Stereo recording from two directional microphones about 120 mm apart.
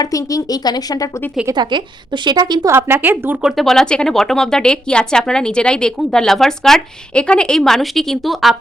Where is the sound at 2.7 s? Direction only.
20° right (ahead or behind).